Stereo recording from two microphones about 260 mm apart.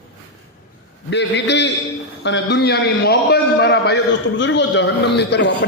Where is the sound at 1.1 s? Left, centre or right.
Left.